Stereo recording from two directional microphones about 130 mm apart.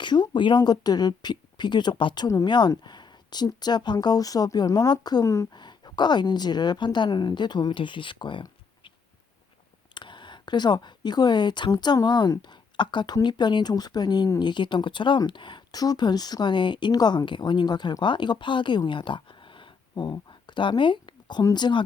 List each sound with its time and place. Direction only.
0.0 s speech: 35° left (ahead or behind)
5.6 s speech: 35° left (ahead or behind)
9.9 s speech: 35° left (ahead or behind)